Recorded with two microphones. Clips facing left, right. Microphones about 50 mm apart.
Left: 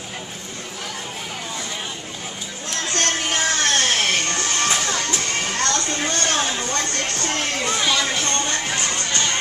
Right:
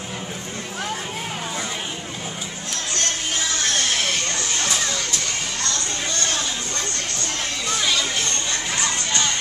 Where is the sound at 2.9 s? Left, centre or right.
Left.